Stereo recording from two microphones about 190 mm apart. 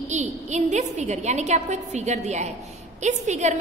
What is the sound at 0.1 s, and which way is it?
A woman's voice, 40° right (ahead or behind).